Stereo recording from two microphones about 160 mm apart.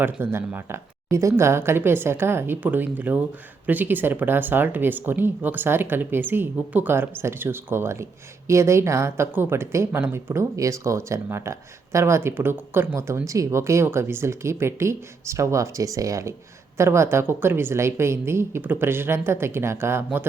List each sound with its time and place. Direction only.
0.0 s a woman's voice: 15° right (ahead or behind)